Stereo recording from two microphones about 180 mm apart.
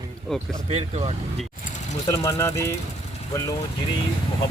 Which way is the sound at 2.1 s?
15° left (ahead or behind).